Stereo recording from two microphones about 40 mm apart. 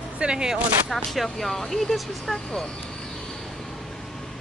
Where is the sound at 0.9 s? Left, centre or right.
Centre.